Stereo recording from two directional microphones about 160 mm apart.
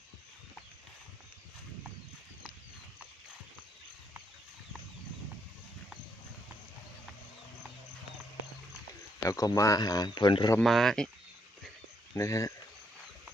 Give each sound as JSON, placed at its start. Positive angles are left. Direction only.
{"t": 9.2, "sound": "speech", "side_deg": 20}
{"t": 10.6, "sound": "speech", "side_deg": 0}
{"t": 12.1, "sound": "speech", "side_deg": 20}